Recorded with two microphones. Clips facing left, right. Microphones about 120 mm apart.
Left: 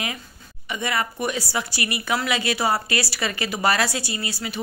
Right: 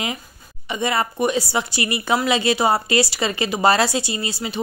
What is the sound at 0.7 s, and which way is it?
A woman's voice, 30° right (ahead or behind).